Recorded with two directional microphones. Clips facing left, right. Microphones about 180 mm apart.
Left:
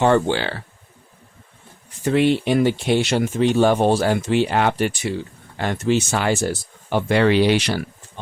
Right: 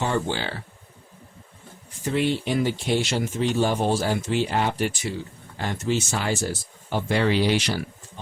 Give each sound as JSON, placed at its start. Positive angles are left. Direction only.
{"t": 0.0, "sound": "speech", "side_deg": 70}
{"t": 2.0, "sound": "speech", "side_deg": 70}